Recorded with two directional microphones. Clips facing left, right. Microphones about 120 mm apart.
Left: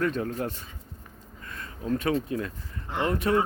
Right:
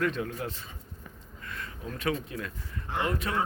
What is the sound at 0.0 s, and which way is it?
Speech, 35° left (ahead or behind).